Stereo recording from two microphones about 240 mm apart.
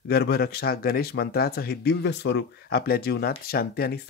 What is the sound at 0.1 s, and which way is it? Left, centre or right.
Speech, left.